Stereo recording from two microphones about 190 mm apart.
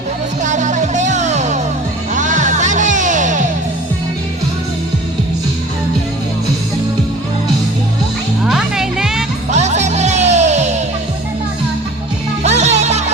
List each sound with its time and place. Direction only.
0.4 s music: 40° right (ahead or behind)
8.4 s music: centre (ahead or behind)
9.5 s music: 35° right (ahead or behind)
12.4 s music: 35° right (ahead or behind)